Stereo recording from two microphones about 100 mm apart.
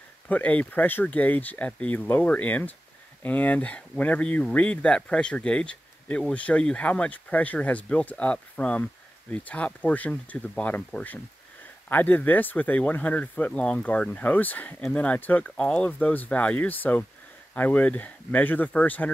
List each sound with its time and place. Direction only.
0.3 s speech: 15° left (ahead or behind)